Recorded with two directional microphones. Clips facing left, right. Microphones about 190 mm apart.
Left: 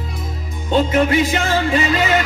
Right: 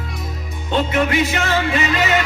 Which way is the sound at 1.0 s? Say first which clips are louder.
Left 2 dB; 35° left (ahead or behind).